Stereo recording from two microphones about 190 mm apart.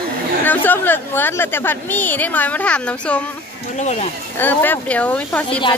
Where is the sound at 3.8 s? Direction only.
40° left (ahead or behind).